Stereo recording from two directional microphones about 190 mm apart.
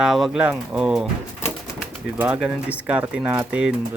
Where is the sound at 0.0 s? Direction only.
Centre (ahead or behind).